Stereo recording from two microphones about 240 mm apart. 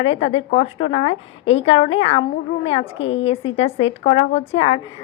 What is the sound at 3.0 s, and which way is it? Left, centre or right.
Speech, left.